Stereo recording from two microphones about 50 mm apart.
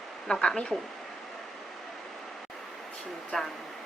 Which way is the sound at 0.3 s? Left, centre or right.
Centre.